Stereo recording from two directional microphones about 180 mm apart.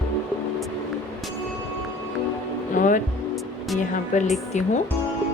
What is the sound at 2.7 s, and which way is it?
Speech, 45° left (ahead or behind).